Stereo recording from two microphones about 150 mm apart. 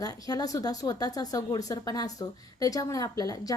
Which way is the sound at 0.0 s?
25° left (ahead or behind).